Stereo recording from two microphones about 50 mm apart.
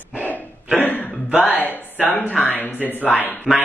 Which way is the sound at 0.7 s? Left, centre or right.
Left.